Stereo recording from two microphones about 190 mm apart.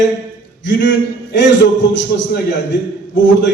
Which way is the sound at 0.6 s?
70° left (ahead or behind).